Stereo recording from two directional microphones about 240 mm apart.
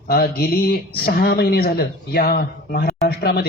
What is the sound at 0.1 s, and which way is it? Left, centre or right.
A man's voice, left.